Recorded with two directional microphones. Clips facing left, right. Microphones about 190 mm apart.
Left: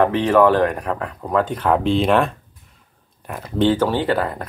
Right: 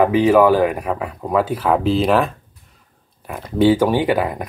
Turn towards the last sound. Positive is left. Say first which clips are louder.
# right 2 dB
turn(degrees=-15)  # may be behind; listen again after turning